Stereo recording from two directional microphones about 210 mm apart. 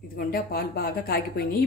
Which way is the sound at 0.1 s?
45° left (ahead or behind).